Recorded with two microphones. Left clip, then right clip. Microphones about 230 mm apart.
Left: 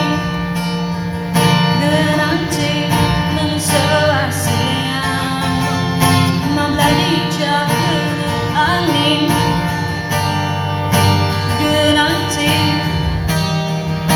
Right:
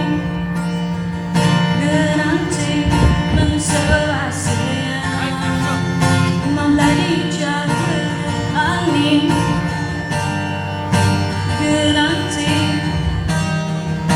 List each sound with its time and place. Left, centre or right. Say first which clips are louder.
1.4 s music: left 4 dB; left
3.7 s music: left 5 dB; left
6.0 s music: left 4 dB; left
8.5 s music: left 2 dB; left
11.6 s music: left 2 dB; left